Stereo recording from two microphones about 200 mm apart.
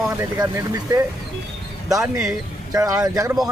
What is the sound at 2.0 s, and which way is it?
Speech, 5° right (ahead or behind).